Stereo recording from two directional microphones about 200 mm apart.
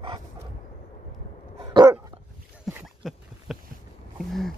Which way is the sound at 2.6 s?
Centre (ahead or behind).